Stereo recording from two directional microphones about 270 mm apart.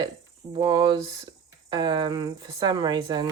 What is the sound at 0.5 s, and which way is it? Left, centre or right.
Speech, centre.